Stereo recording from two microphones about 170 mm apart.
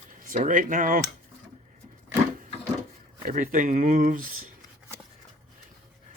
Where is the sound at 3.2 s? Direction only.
55° right (ahead or behind).